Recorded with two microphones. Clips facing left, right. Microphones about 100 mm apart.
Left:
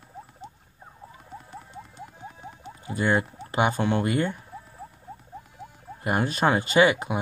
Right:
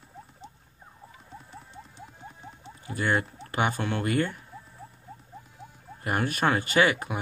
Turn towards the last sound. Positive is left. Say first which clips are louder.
# left 3 dB
turn(degrees=20)  # may be behind; listen again after turning